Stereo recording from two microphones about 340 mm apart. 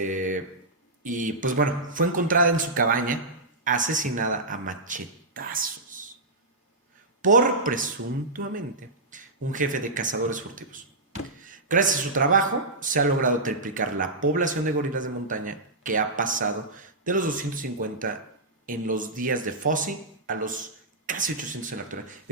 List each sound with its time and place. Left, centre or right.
0.0 s speech: right
7.2 s speech: right